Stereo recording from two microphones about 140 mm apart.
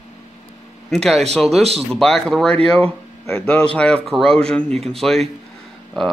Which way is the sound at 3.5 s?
5° left (ahead or behind).